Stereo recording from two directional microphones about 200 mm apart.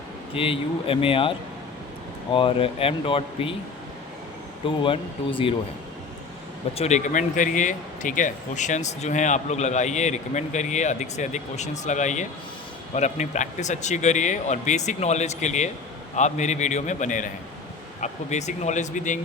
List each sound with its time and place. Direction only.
0.3 s speech: 25° left (ahead or behind)
2.3 s speech: 25° left (ahead or behind)
4.8 s speech: 25° left (ahead or behind)
6.7 s speech: 35° left (ahead or behind)